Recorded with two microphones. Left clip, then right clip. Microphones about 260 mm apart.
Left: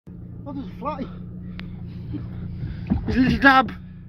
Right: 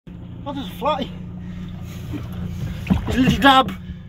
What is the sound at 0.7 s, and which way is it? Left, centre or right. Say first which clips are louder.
Speech: right 9 dB; right.